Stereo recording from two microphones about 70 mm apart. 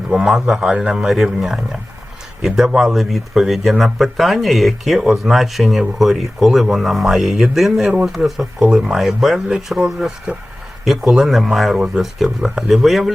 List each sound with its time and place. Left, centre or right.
0.1 s speech: centre
10.3 s speech: centre
10.8 s speech: centre